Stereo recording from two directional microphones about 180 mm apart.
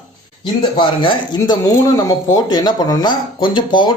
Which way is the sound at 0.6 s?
25° left (ahead or behind).